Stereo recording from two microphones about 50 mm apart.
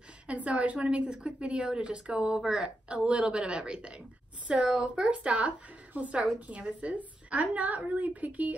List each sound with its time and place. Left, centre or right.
0.3 s a woman's voice: right